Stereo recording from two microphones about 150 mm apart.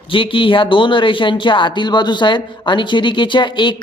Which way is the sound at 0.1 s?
35° left (ahead or behind).